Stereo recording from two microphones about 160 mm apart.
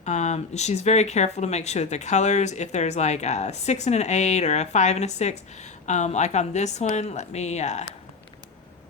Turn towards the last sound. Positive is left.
turn(degrees=45)  # may be behind; listen again after turning